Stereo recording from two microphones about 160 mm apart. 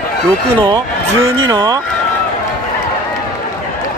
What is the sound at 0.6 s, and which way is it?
Speech, 30° right (ahead or behind).